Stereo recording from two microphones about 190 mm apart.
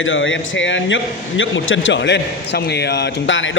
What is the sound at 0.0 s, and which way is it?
A man's voice, 90° left.